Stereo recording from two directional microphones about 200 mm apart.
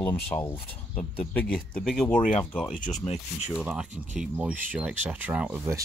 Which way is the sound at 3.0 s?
30° left (ahead or behind).